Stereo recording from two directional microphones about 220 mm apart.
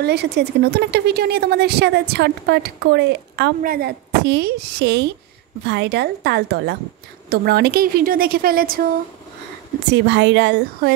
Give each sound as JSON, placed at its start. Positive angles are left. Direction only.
{"t": 0.0, "sound": "a woman's voice", "side_deg": -50}
{"t": 9.8, "sound": "speech", "side_deg": -50}